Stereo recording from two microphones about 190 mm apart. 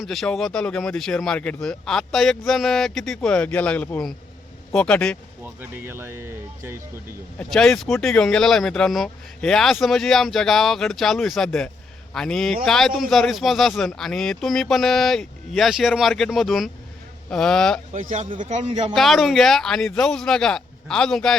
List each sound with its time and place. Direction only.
0.0 s speech: centre (ahead or behind)
5.4 s speech: 10° right (ahead or behind)
7.3 s speech: 5° left (ahead or behind)
17.9 s a man's voice: 40° right (ahead or behind)
18.9 s speech: centre (ahead or behind)